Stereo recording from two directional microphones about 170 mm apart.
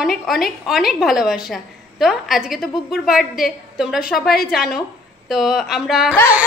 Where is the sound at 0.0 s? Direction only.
Centre (ahead or behind).